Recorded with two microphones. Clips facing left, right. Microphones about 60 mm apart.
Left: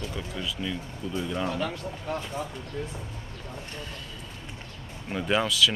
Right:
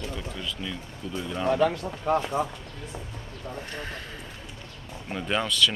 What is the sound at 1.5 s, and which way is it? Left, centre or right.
Speech, right.